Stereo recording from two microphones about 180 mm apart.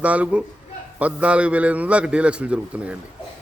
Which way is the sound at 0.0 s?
5° right (ahead or behind).